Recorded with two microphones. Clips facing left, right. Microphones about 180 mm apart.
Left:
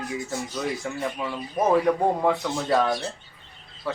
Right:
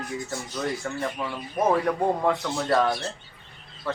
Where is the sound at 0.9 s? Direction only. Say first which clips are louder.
Left 1 dB; 5° left (ahead or behind).